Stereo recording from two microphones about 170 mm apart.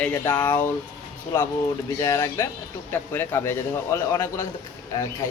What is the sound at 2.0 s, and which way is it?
Speech, 20° left (ahead or behind).